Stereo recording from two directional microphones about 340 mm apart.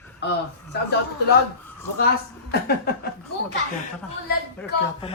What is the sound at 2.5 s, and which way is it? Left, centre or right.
Speech, left.